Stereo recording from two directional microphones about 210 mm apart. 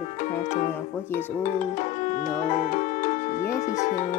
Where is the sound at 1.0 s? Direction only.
10° left (ahead or behind).